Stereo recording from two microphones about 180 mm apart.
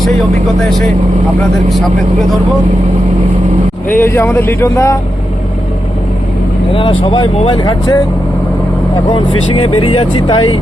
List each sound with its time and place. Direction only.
0.6 s speech: 5° left (ahead or behind)
3.8 s speech: 10° left (ahead or behind)
6.7 s speech: 30° left (ahead or behind)
9.6 s speech: 30° left (ahead or behind)